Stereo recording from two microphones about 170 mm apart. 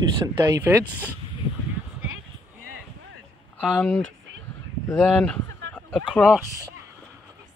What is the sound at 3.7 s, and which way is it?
Speech, 5° left (ahead or behind).